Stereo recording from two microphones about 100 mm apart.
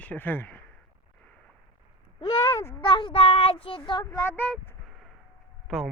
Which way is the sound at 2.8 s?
55° left (ahead or behind).